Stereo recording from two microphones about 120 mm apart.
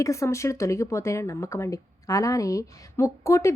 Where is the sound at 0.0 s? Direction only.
25° left (ahead or behind).